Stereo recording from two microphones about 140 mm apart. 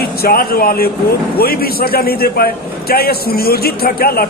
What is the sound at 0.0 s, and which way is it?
A man's voice, 90° left.